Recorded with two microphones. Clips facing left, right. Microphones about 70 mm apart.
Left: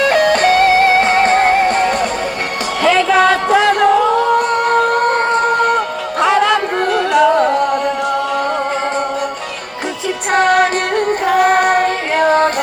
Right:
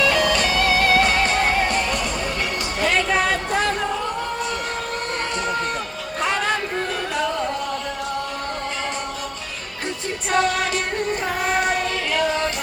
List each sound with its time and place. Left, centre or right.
0.0 s music: left
3.2 s music: left
4.5 s a sound: left
5.5 s a sound: left
6.1 s music: left
10.3 s music: left
11.3 s child singing: left